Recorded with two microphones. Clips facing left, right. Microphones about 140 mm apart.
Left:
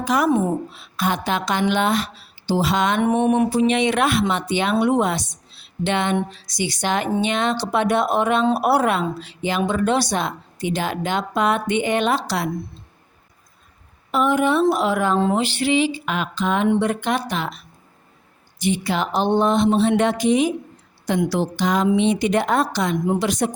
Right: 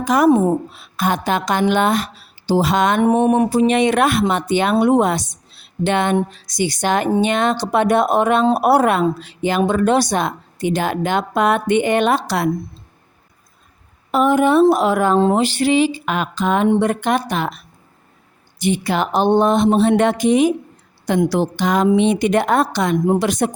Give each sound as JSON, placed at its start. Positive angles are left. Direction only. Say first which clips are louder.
{"t": 0.0, "sound": "a woman's voice", "louder": "right 5 dB", "side_deg": -45}
{"t": 0.7, "sound": "speech", "louder": "right 3 dB", "side_deg": -50}
{"t": 14.1, "sound": "speech", "louder": "right 4 dB", "side_deg": -45}
{"t": 18.6, "sound": "a woman's voice", "louder": "right 3 dB", "side_deg": -55}